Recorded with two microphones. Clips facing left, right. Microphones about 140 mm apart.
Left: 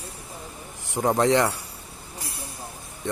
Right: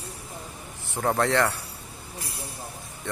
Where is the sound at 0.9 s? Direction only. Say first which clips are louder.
Left 3 dB; 15° left (ahead or behind).